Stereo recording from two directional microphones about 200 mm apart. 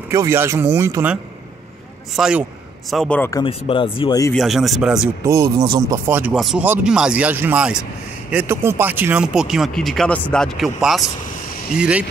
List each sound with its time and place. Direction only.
0.1 s a man's voice: 15° right (ahead or behind); by 3.4 s 10° left (ahead or behind)
3.4 s speech: 25° left (ahead or behind)
4.3 s speech: centre (ahead or behind)
5.2 s speech: 15° right (ahead or behind)